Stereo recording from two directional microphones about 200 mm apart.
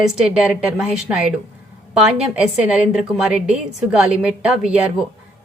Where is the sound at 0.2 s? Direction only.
5° right (ahead or behind).